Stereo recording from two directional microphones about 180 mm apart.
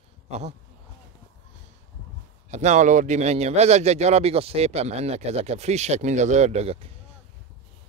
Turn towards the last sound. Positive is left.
turn(degrees=-35)  # may be behind; listen again after turning